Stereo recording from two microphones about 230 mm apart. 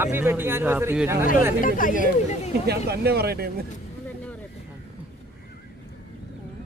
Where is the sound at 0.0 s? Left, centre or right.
Centre.